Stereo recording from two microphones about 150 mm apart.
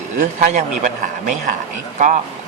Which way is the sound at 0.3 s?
55° right (ahead or behind).